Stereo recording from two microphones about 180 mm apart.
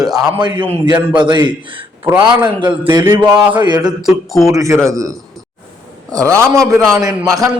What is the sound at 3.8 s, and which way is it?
Speech, centre (ahead or behind).